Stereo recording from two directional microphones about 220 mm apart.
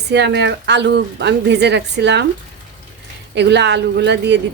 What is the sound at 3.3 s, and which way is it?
Speech, 50° right (ahead or behind).